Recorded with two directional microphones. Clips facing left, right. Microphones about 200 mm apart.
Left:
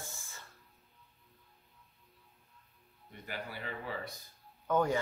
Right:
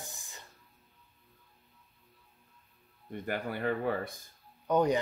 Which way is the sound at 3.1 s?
55° right (ahead or behind).